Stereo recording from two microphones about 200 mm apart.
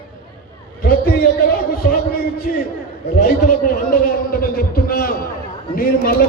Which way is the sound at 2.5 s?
45° left (ahead or behind).